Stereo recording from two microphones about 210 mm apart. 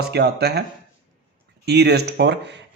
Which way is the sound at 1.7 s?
50° right (ahead or behind).